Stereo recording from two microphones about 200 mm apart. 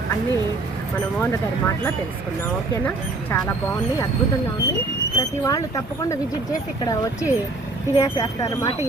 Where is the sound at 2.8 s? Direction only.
10° left (ahead or behind).